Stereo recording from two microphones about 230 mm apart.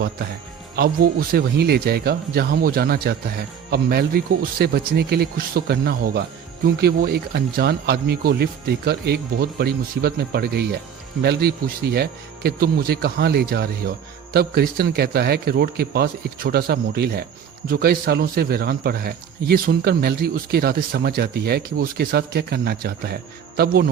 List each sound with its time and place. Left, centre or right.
0.8 s a man's voice: right